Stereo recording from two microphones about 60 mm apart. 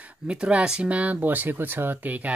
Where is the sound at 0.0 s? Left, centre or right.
Centre.